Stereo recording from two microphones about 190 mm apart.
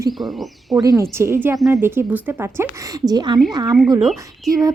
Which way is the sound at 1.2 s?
10° right (ahead or behind).